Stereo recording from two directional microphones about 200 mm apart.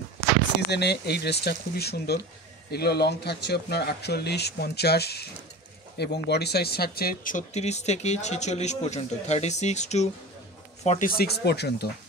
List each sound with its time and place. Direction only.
0.7 s speech: 55° left (ahead or behind); by 11.1 s 35° left (ahead or behind)
11.1 s speech: 50° left (ahead or behind)